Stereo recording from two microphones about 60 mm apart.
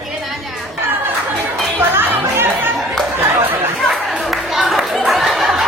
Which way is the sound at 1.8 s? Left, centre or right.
Right.